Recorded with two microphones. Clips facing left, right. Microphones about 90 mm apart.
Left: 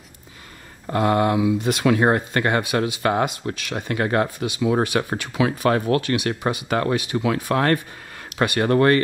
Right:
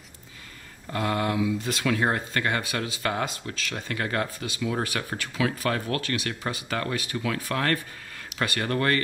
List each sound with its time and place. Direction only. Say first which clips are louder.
0.8 s speech: left 8 dB; 30° left (ahead or behind)
1.9 s speech: left 7 dB; 30° left (ahead or behind)